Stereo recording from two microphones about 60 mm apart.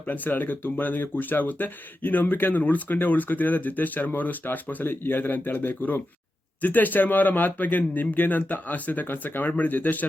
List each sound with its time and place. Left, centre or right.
0.1 s speech: left